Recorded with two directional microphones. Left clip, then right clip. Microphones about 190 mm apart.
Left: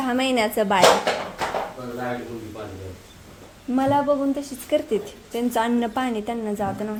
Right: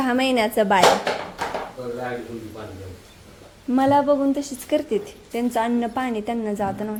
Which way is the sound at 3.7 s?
15° right (ahead or behind).